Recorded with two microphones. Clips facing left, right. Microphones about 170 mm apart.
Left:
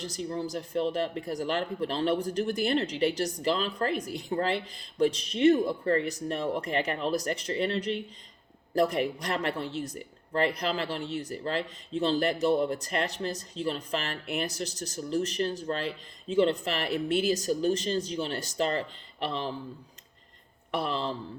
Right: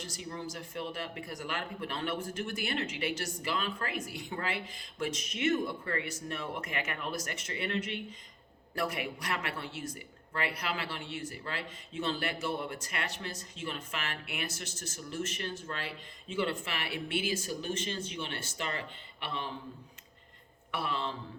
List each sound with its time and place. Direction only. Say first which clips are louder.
0.3 s speech: left 7 dB; 35° left (ahead or behind)
20.7 s speech: left 5 dB; 35° left (ahead or behind)